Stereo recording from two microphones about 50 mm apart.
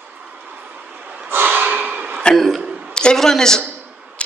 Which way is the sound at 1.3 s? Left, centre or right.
Right.